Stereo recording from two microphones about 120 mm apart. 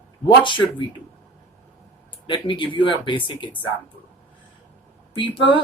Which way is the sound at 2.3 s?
45° left (ahead or behind).